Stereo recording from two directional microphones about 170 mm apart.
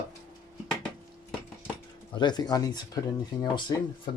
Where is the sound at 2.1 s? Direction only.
25° left (ahead or behind).